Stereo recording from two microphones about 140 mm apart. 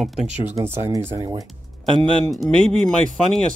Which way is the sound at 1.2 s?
35° right (ahead or behind).